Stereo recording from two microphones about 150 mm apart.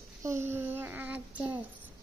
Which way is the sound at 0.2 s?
20° right (ahead or behind).